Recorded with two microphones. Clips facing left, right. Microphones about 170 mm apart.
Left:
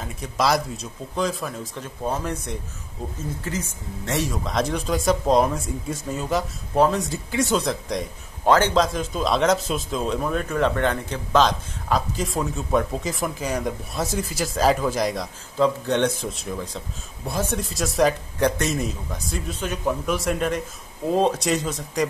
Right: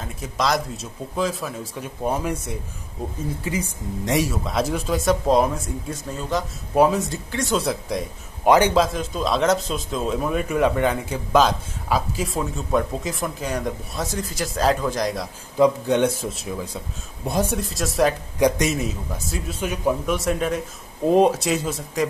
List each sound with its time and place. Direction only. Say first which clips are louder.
0.0 s speech: left 1 dB; centre (ahead or behind)
6.7 s speech: right 2 dB; 10° right (ahead or behind); by 7.5 s 10° left (ahead or behind)
7.5 s speech: even; 5° right (ahead or behind)
8.5 s a man's voice: right 2 dB; 15° right (ahead or behind)
8.8 s speech: even; centre (ahead or behind)
15.5 s a man's voice: right 3 dB; 10° right (ahead or behind)
17.6 s speech: even; centre (ahead or behind)
18.4 s a man's voice: right 3 dB; 10° right (ahead or behind)
18.8 s a man's voice: right 1 dB; centre (ahead or behind)
20.1 s speech: right 1 dB; centre (ahead or behind)
21.0 s speech: right 4 dB; 20° right (ahead or behind)
21.3 s speech: right 1 dB; 5° right (ahead or behind)